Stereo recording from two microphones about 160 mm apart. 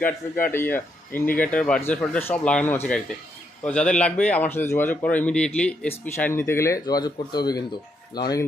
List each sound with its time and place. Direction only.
0.5 s speech: 15° left (ahead or behind)